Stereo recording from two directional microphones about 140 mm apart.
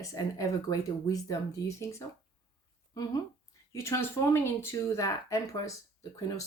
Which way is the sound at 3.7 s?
20° left (ahead or behind).